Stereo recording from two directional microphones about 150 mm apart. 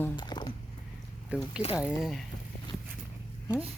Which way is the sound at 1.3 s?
10° right (ahead or behind).